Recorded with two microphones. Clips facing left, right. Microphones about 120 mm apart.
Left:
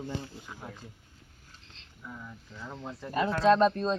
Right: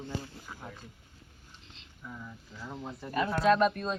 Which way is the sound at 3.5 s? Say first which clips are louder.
Left 3 dB; 25° left (ahead or behind).